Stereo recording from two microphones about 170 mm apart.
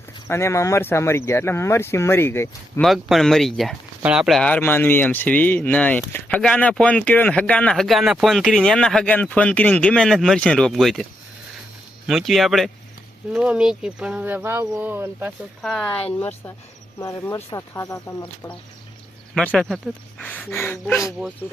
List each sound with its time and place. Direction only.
0.3 s speech: 15° left (ahead or behind)
2.8 s speech: centre (ahead or behind)
12.0 s speech: centre (ahead or behind)
15.6 s speech: 5° left (ahead or behind)
17.0 s speech: 20° left (ahead or behind)
19.3 s speech: 5° left (ahead or behind)